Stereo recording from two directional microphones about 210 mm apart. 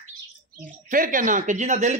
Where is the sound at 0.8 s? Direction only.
40° right (ahead or behind).